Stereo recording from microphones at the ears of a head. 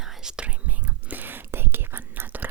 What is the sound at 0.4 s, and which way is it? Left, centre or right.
Whispering, right.